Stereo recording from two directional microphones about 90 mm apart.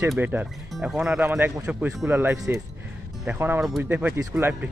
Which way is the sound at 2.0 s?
25° right (ahead or behind).